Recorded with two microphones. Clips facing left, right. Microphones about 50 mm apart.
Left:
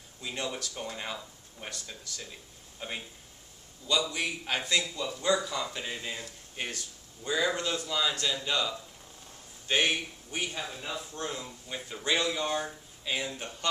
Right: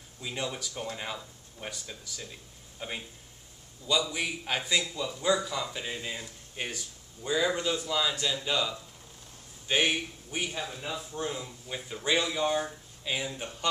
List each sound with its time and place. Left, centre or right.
0.2 s speech: centre
4.1 s a man's voice: centre